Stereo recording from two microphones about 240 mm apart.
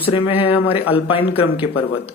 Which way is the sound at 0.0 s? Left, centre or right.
Left.